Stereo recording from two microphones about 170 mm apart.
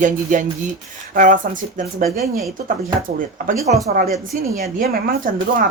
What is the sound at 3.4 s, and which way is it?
Speech, 55° right (ahead or behind).